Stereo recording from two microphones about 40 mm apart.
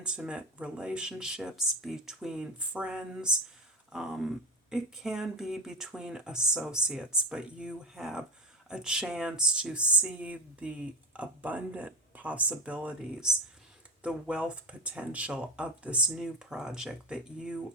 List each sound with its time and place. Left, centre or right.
0.0 s speech: right
2.6 s speech: right
3.9 s speech: centre; by 13.0 s right
14.0 s speech: right
16.1 s speech: centre